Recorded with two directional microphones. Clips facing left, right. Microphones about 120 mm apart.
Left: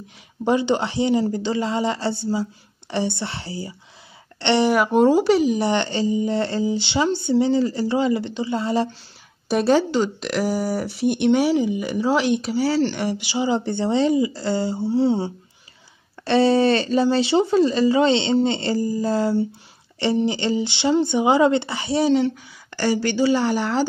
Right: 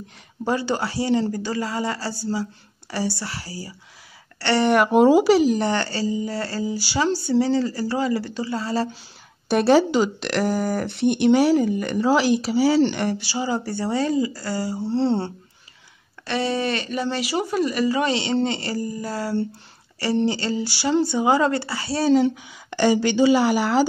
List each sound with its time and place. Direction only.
0.5 s speech: 20° left (ahead or behind)
4.6 s speech: centre (ahead or behind)
5.6 s speech: 20° left (ahead or behind)
9.5 s a woman's voice: centre (ahead or behind)
10.2 s speech: 5° left (ahead or behind)
12.9 s speech: 5° left (ahead or behind)
13.2 s speech: 20° left (ahead or behind)
14.9 s speech: 5° left (ahead or behind)
16.3 s speech: 30° left (ahead or behind)
22.1 s a woman's voice: 10° right (ahead or behind)
23.4 s a woman's voice: 5° right (ahead or behind)